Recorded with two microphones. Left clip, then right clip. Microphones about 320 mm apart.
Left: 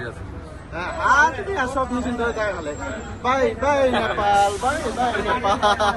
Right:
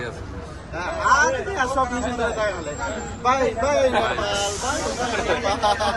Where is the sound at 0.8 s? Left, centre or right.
Left.